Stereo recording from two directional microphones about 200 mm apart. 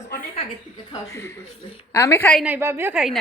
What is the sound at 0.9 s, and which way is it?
A woman's voice, 15° left (ahead or behind).